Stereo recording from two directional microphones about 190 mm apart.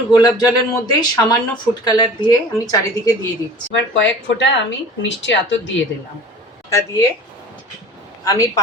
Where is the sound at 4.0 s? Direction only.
75° left (ahead or behind).